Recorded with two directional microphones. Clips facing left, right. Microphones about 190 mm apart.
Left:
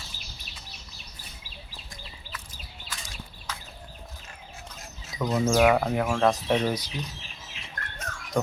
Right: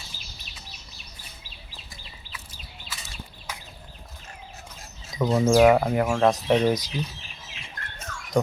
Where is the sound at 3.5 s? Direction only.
15° right (ahead or behind).